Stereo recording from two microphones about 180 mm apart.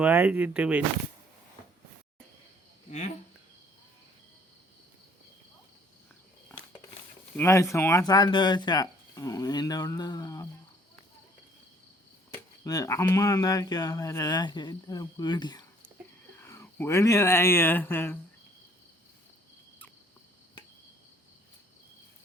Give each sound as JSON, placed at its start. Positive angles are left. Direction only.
{"t": 0.0, "sound": "speech", "side_deg": -10}
{"t": 7.3, "sound": "speech", "side_deg": 15}
{"t": 12.3, "sound": "speech", "side_deg": 20}
{"t": 16.4, "sound": "speech", "side_deg": 15}